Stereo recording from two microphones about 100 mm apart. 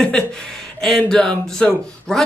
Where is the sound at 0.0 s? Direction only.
5° left (ahead or behind).